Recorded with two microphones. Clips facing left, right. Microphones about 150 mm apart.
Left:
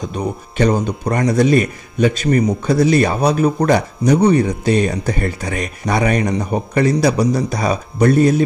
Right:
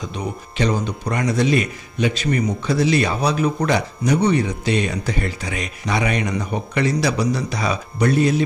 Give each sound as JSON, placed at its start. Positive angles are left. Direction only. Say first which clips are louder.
{"t": 0.1, "sound": "speech", "louder": "left 5 dB", "side_deg": 45}